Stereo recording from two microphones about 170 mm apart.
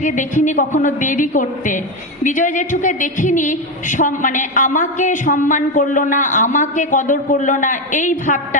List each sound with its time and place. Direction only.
0.0 s a woman's voice: 45° left (ahead or behind)